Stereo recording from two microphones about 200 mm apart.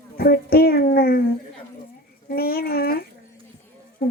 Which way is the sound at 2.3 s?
50° left (ahead or behind).